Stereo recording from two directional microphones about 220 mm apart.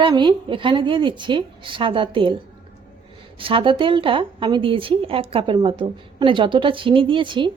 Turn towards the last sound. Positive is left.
turn(degrees=-20)  # may be behind; listen again after turning